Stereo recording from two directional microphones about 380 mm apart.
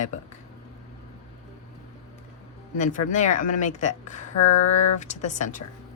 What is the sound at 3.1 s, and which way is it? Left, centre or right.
A woman's voice, centre.